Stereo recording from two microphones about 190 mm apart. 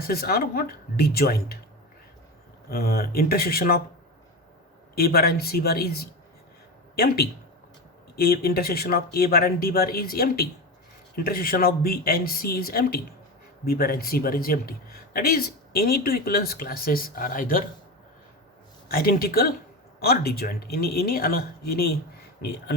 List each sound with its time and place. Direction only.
0.0 s speech: 55° left (ahead or behind)
2.6 s speech: 55° left (ahead or behind)
4.9 s speech: 55° left (ahead or behind)
18.9 s speech: 50° left (ahead or behind)